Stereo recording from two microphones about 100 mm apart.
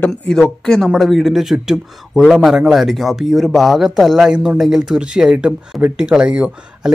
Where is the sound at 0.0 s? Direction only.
5° left (ahead or behind).